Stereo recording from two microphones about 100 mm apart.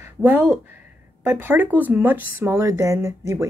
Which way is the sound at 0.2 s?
20° right (ahead or behind).